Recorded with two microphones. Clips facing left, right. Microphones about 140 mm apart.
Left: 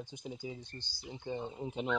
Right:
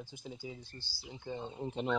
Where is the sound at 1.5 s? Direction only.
Centre (ahead or behind).